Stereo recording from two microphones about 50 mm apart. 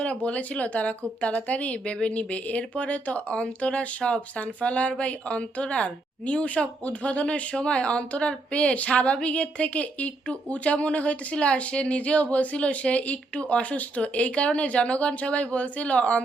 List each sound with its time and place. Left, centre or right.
0.0 s a woman's voice: left